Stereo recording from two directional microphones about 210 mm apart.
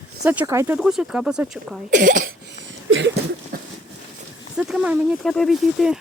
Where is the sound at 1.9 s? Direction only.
40° right (ahead or behind).